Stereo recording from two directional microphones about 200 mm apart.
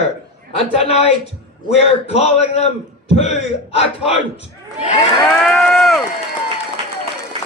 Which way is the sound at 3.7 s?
30° left (ahead or behind).